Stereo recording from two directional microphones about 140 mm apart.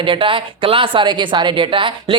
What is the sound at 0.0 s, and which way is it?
Speech, 40° right (ahead or behind).